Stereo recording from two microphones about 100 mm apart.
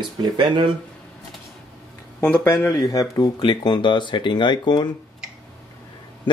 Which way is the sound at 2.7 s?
35° left (ahead or behind).